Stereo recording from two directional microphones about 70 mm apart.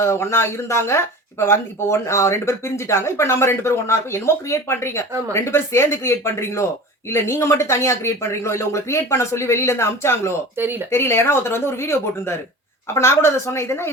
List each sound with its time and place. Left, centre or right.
0.0 s speech: left
10.6 s speech: right
10.9 s speech: left